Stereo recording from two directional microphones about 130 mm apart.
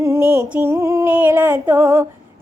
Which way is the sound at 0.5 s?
20° right (ahead or behind).